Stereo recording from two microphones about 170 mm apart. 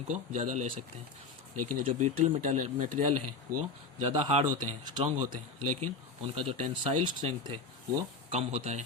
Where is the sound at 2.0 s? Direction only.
45° right (ahead or behind).